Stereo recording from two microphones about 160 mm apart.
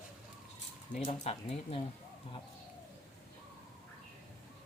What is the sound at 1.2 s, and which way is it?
Speech, 35° left (ahead or behind).